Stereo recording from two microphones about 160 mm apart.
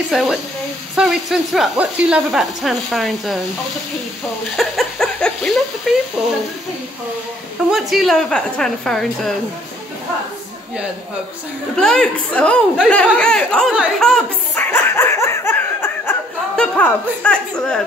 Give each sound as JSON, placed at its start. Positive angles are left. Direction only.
{"t": 0.1, "sound": "speech", "side_deg": 0}
{"t": 4.6, "sound": "a sound", "side_deg": 0}
{"t": 6.2, "sound": "speech", "side_deg": -5}
{"t": 7.7, "sound": "speech", "side_deg": 0}
{"t": 11.7, "sound": "speech", "side_deg": 5}
{"t": 14.7, "sound": "laughter", "side_deg": 15}